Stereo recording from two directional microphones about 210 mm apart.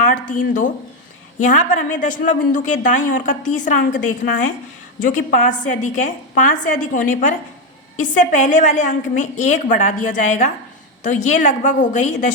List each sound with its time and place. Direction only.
0.3 s a woman's voice: 40° left (ahead or behind)
5.0 s a woman's voice: 40° left (ahead or behind)